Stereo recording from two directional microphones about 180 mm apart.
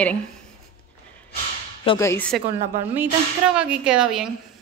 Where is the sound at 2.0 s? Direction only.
10° left (ahead or behind).